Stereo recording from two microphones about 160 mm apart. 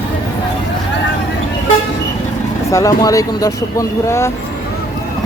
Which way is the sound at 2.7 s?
20° left (ahead or behind).